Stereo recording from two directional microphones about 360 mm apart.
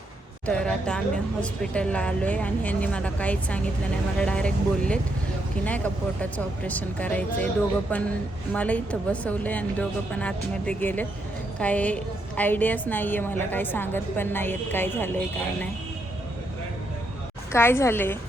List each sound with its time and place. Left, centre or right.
0.4 s speech: centre
8.5 s speech: centre
17.5 s a woman's voice: centre